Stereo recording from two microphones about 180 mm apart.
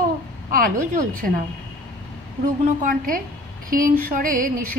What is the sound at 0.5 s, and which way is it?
Speech, 50° right (ahead or behind).